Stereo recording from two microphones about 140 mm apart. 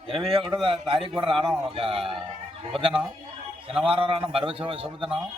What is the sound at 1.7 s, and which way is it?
Speech, 40° right (ahead or behind).